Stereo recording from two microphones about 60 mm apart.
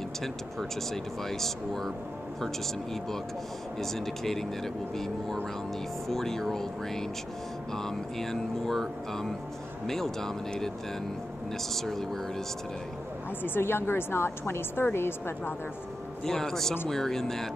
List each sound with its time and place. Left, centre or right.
1.3 s speech: centre
13.4 s a woman's voice: left
16.3 s speech: centre